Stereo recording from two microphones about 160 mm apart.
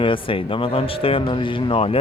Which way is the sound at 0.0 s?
35° left (ahead or behind).